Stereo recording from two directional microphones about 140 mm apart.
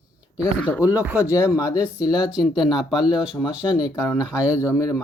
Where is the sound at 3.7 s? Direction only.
25° left (ahead or behind).